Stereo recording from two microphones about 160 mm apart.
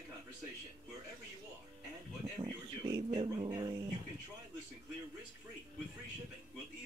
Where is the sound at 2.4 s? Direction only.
25° right (ahead or behind).